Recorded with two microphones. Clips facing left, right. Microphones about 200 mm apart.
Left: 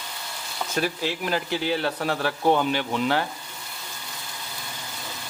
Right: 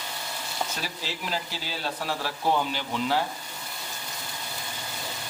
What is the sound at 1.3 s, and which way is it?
Speech, 65° left (ahead or behind).